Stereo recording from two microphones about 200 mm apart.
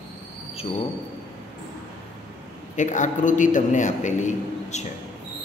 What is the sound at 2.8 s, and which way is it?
A man's voice, 40° left (ahead or behind).